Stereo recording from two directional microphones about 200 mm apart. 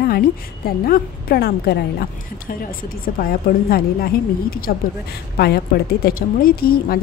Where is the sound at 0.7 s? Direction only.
50° left (ahead or behind).